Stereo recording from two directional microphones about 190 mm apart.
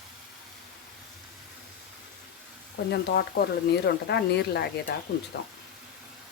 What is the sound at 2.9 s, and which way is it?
Speech, 55° left (ahead or behind).